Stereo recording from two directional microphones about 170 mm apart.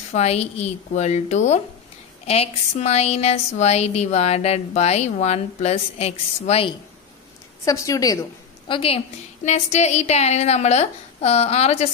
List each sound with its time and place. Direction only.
0.1 s a woman's voice: 40° left (ahead or behind)
7.6 s a woman's voice: 20° left (ahead or behind); by 11.9 s 35° left (ahead or behind)